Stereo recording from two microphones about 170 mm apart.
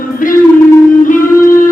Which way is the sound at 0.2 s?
50° left (ahead or behind).